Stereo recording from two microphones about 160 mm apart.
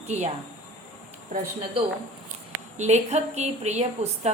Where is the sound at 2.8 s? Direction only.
45° right (ahead or behind).